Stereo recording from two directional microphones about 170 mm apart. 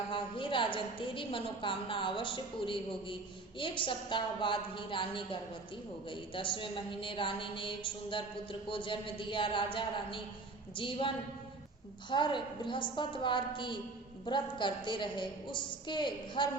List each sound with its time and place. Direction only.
0.1 s a woman's voice: 30° left (ahead or behind)
12.1 s a woman's voice: 30° left (ahead or behind)